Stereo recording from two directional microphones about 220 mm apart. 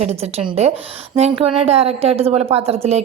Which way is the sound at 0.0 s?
30° right (ahead or behind).